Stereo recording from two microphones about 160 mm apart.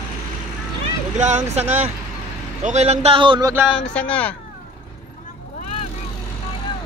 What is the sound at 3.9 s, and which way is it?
Speech, 10° left (ahead or behind).